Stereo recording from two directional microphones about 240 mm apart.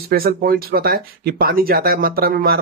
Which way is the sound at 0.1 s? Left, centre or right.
Right.